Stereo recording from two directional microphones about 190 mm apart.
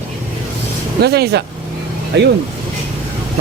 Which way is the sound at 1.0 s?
60° right (ahead or behind).